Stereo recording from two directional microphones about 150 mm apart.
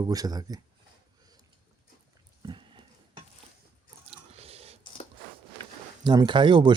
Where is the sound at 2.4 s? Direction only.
30° right (ahead or behind).